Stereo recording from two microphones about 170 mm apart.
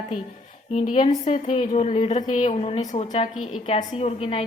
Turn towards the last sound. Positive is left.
turn(degrees=35)  # may be behind; listen again after turning